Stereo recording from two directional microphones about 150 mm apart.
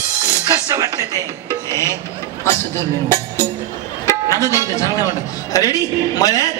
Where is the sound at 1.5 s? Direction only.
20° left (ahead or behind).